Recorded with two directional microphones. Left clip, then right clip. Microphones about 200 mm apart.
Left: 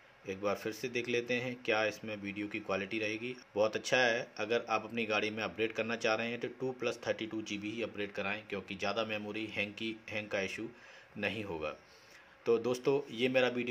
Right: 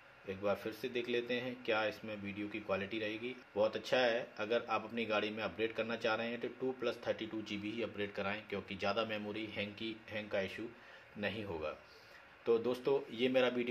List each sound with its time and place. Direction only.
0.3 s a man's voice: 30° left (ahead or behind)